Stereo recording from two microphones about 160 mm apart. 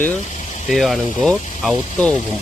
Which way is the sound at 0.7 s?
Centre (ahead or behind).